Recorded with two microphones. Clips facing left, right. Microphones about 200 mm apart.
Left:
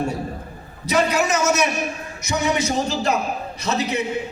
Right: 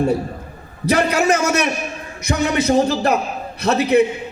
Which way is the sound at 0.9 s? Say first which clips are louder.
Right 4 dB; 55° right (ahead or behind).